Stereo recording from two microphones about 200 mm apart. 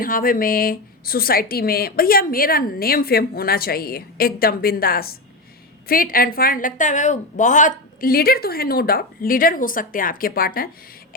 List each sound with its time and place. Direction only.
0.0 s a woman's voice: 45° left (ahead or behind)
8.0 s a woman's voice: 50° left (ahead or behind)